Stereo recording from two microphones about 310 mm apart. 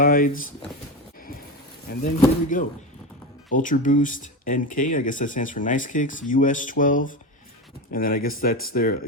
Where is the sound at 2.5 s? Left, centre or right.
Left.